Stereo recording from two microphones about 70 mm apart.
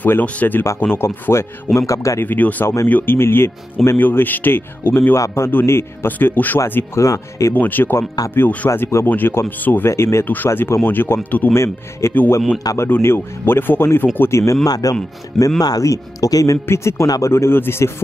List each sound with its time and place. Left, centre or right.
0.0 s speech: left
1.8 s speech: left
2.2 s speech: left
2.6 s speech: left
2.9 s speech: left
5.1 s speech: left
7.0 s speech: left
7.5 s speech: left
11.5 s speech: left
14.4 s speech: left
14.7 s speech: left
16.6 s speech: left